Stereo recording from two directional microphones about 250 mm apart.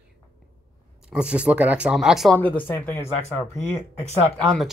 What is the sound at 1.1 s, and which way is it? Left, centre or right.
Speech, centre.